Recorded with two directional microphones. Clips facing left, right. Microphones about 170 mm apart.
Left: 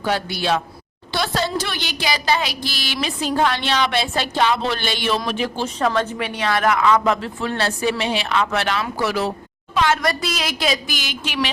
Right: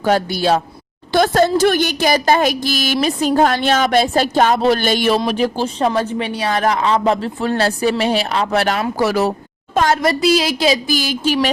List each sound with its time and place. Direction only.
0.0 s a woman's voice: 45° right (ahead or behind)
10.0 s speech: 25° right (ahead or behind)